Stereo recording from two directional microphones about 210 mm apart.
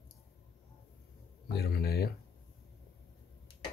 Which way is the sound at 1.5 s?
50° left (ahead or behind).